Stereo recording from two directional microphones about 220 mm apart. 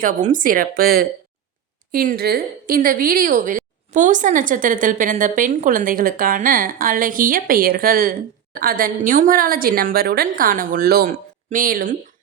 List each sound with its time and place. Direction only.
0.0 s a woman's voice: 35° right (ahead or behind)